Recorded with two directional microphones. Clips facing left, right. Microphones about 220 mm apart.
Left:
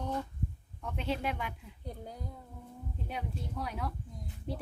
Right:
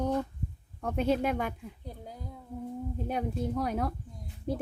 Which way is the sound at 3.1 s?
45° right (ahead or behind).